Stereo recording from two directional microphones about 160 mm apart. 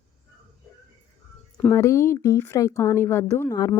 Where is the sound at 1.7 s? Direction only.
20° left (ahead or behind).